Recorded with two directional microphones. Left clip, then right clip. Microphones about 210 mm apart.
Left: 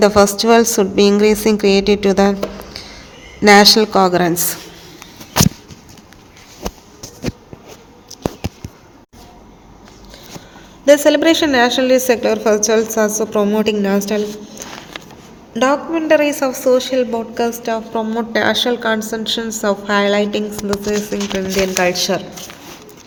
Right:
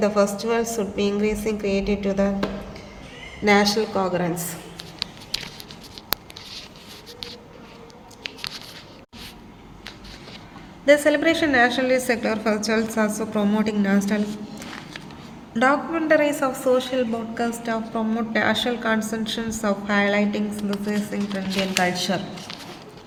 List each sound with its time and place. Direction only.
0.0 s a woman's voice: 40° left (ahead or behind)
3.4 s a woman's voice: 40° left (ahead or behind)
10.8 s a woman's voice: 20° left (ahead or behind)
15.5 s a woman's voice: 20° left (ahead or behind)